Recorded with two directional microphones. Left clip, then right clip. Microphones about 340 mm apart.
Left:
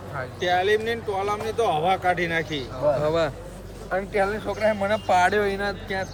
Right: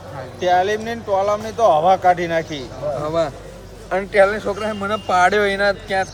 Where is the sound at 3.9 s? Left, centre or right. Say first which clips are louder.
Right 9 dB; right.